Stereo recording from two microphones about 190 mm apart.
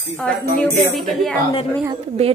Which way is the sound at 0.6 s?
Centre (ahead or behind).